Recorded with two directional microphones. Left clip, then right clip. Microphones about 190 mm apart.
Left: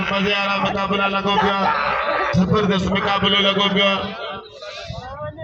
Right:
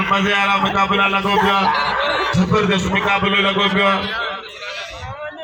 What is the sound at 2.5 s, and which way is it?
A man's voice, 35° right (ahead or behind).